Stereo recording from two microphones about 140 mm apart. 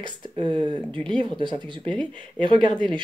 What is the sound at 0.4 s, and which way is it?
Speech, 35° right (ahead or behind).